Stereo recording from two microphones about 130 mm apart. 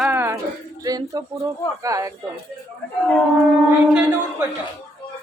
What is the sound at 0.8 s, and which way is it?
Speech, 30° right (ahead or behind).